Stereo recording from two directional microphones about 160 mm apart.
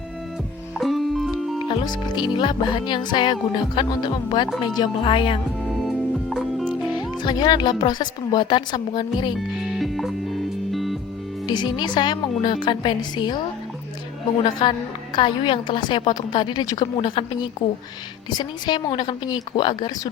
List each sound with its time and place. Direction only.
0.8 s music: centre (ahead or behind)
1.6 s a woman's voice: 25° left (ahead or behind)
6.3 s music: centre (ahead or behind)
6.9 s a woman's voice: 25° left (ahead or behind)
9.6 s music: centre (ahead or behind)
11.4 s a woman's voice: 25° left (ahead or behind)
14.4 s a woman's voice: 30° left (ahead or behind)